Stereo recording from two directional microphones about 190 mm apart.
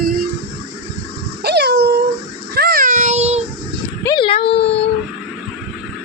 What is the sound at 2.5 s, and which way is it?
Child singing, 55° right (ahead or behind).